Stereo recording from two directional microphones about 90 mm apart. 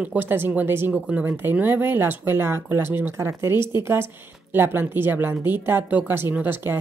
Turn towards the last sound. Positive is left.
turn(degrees=-25)  # may be behind; listen again after turning